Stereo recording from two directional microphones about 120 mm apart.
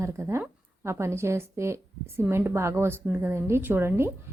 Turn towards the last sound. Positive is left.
turn(degrees=-20)  # may be behind; listen again after turning